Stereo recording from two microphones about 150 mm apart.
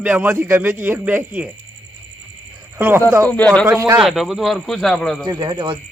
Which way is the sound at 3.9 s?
Centre (ahead or behind).